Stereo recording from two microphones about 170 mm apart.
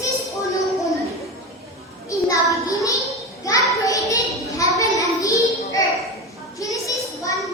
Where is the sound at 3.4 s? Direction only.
20° left (ahead or behind).